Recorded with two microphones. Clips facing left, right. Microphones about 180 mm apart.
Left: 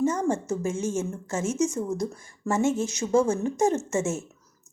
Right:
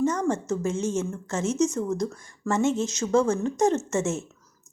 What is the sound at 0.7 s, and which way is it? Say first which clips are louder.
Speech: right 1 dB; 50° left (ahead or behind).